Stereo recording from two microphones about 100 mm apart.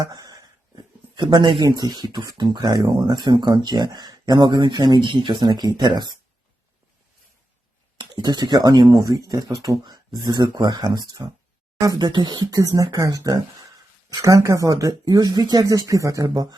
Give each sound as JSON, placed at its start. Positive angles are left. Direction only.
{"t": 0.0, "sound": "a sound", "side_deg": -40}
{"t": 1.1, "sound": "speech", "side_deg": -50}
{"t": 7.9, "sound": "speech", "side_deg": -45}
{"t": 16.2, "sound": "speech", "side_deg": -45}